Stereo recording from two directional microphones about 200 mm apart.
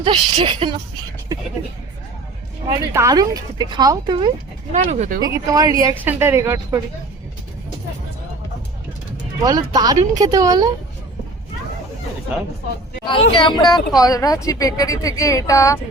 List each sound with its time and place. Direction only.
0.0 s speech: 25° right (ahead or behind)
2.7 s speech: 15° right (ahead or behind)
4.7 s speech: 35° right (ahead or behind)
5.2 s a woman's voice: 20° right (ahead or behind)
9.4 s speech: 20° right (ahead or behind)
13.3 s speech: 25° left (ahead or behind)